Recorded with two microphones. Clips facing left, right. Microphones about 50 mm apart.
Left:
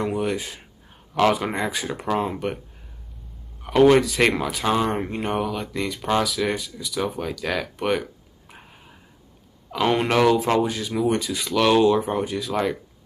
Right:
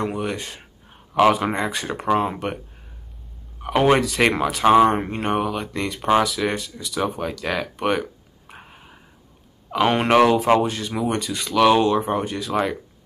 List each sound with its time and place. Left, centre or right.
0.0 s speech: centre
0.8 s a sound: centre
1.5 s speech: centre
2.0 s speech: centre
3.6 s speech: centre
4.0 s speech: centre
4.6 s speech: right
5.4 s speech: centre
5.9 s speech: centre
6.2 s speech: centre
8.5 s a sound: centre
9.7 s speech: centre
10.6 s speech: centre
11.5 s speech: centre